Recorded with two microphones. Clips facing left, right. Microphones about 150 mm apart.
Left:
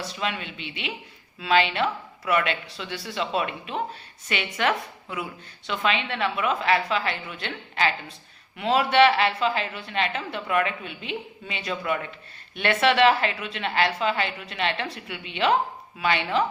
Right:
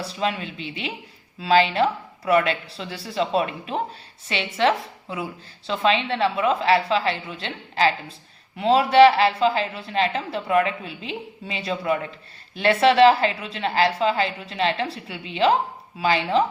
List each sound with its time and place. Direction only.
0.0 s a woman's voice: 35° right (ahead or behind)